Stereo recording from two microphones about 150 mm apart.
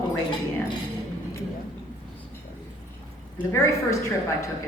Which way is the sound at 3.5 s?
20° left (ahead or behind).